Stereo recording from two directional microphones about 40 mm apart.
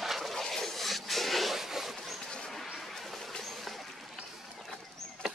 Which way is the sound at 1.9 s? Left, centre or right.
Centre.